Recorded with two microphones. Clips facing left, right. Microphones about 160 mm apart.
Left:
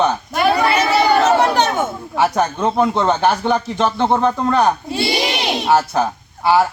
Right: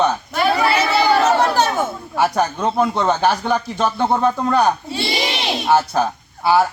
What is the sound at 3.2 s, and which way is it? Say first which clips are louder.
Speech: left 2 dB; 20° left (ahead or behind).